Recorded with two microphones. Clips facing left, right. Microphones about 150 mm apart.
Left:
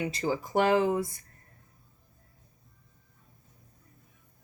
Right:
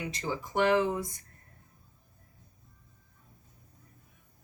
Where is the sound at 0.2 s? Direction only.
35° left (ahead or behind).